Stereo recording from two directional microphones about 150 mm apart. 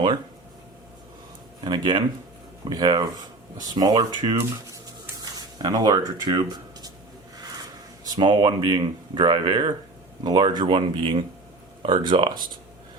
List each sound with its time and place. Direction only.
1.6 s speech: 30° right (ahead or behind)
8.0 s speech: 30° right (ahead or behind)